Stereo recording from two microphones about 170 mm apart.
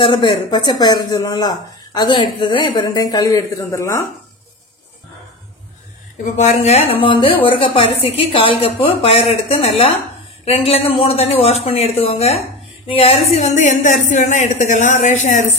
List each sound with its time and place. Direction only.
0.0 s speech: 25° left (ahead or behind)
6.2 s a woman's voice: 45° left (ahead or behind)
13.3 s speech: 45° left (ahead or behind)